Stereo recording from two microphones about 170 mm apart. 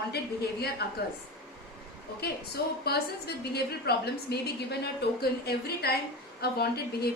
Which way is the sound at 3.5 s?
70° left (ahead or behind).